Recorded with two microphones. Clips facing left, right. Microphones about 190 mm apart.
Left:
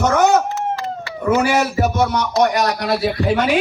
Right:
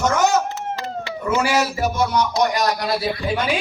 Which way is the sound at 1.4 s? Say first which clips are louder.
Left 3 dB; 55° left (ahead or behind).